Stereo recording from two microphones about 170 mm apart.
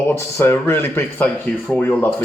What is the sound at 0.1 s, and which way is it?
Speech, 15° left (ahead or behind).